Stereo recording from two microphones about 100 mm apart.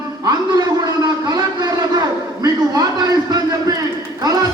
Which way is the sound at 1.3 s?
40° right (ahead or behind).